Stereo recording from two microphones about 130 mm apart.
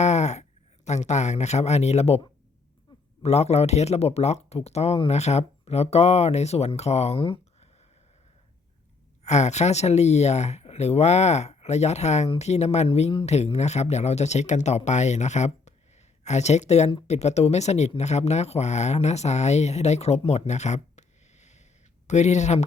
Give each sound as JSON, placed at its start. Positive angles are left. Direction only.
{"t": 0.0, "sound": "a sound", "side_deg": 60}
{"t": 0.9, "sound": "speech", "side_deg": 60}
{"t": 3.2, "sound": "speech", "side_deg": 55}
{"t": 9.2, "sound": "speech", "side_deg": 60}